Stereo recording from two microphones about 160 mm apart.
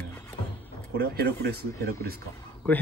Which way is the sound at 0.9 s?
75° right (ahead or behind).